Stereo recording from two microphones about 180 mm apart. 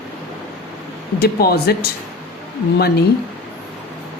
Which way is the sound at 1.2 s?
60° left (ahead or behind).